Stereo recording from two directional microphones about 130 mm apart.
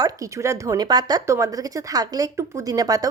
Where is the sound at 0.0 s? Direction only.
25° right (ahead or behind).